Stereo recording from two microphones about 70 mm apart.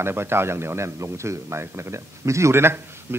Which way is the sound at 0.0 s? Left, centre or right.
Right.